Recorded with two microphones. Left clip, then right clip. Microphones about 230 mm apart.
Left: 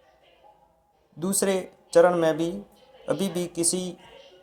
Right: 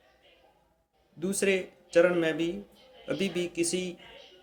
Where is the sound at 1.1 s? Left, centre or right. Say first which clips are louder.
Left 2 dB; centre.